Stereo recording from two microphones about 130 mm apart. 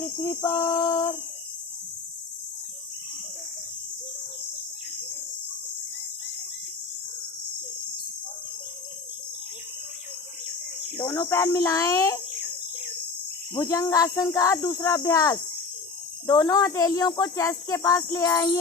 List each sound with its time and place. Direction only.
0.2 s speech: 20° left (ahead or behind)
11.1 s speech: 20° left (ahead or behind)
13.5 s speech: 25° left (ahead or behind)